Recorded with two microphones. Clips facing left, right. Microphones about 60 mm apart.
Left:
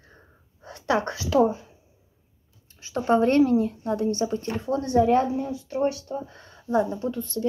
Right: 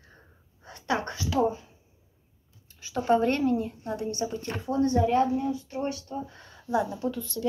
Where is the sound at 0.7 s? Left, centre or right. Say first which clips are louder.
Left 5 dB; left.